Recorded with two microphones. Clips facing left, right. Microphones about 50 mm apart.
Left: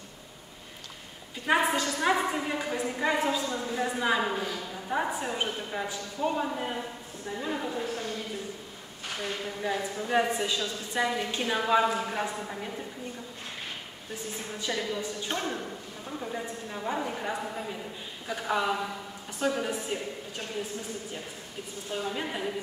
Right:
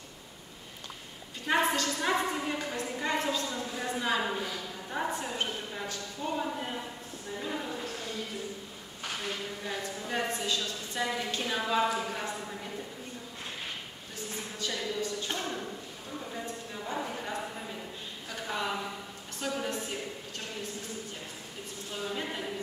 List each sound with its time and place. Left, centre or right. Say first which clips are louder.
1.5 s a woman's voice: left 2 dB; centre
9.6 s a woman's voice: left 5 dB; centre
14.6 s a woman's voice: left 2 dB; centre
16.7 s a woman's voice: left 4 dB; left
18.3 s a woman's voice: left 6 dB; centre
22.1 s a woman's voice: left 3 dB; centre